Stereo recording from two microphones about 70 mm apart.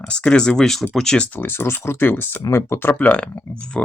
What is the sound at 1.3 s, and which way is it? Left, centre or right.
Speech, left.